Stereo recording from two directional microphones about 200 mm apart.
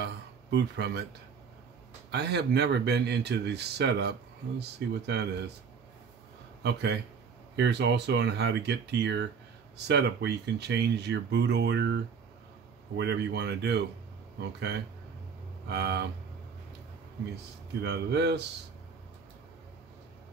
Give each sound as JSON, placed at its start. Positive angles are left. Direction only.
{"t": 0.0, "sound": "a sound", "side_deg": -55}
{"t": 2.0, "sound": "speech", "side_deg": -55}
{"t": 6.6, "sound": "speech", "side_deg": -55}
{"t": 15.7, "sound": "speech", "side_deg": -55}
{"t": 17.8, "sound": "speech", "side_deg": -55}